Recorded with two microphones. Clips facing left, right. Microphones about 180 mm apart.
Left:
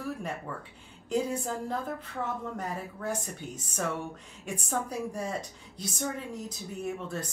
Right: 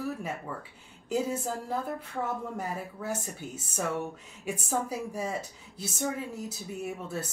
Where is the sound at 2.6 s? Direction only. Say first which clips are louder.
Right 1 dB; 10° right (ahead or behind).